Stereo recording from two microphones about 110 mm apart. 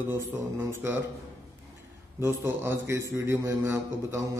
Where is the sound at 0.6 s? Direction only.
20° right (ahead or behind).